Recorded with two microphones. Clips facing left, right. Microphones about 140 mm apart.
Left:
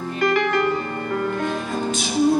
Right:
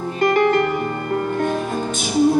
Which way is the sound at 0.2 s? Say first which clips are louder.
Right 4 dB; 45° right (ahead or behind).